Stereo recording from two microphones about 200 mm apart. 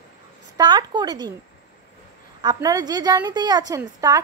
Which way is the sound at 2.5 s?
15° right (ahead or behind).